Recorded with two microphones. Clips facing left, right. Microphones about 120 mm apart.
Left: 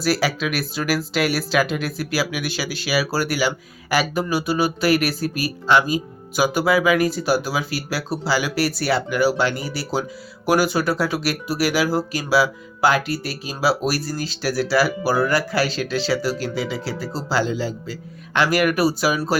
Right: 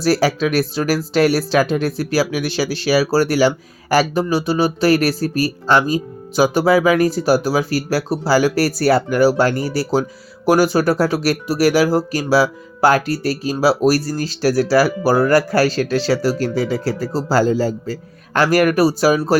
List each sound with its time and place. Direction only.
0.0 s speech: 35° right (ahead or behind)